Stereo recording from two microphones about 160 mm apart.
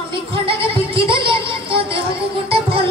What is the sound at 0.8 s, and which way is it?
Music, 35° right (ahead or behind).